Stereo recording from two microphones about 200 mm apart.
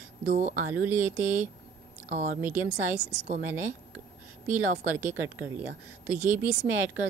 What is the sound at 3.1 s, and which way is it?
Speech, 40° right (ahead or behind).